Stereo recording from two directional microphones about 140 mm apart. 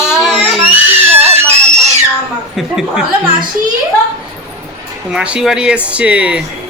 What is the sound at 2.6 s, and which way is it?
Speech, 5° right (ahead or behind).